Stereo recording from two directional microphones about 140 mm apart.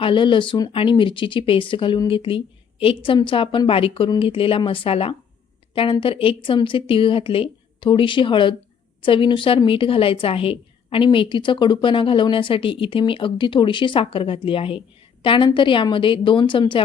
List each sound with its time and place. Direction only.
0.0 s a woman's voice: 35° left (ahead or behind)